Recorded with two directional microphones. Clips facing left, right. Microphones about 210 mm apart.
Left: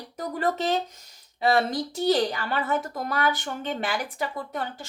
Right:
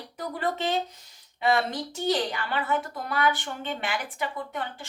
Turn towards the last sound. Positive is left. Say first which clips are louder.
# left 2 dB
turn(degrees=40)  # may be behind; listen again after turning